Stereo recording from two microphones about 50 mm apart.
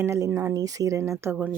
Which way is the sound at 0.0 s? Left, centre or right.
Right.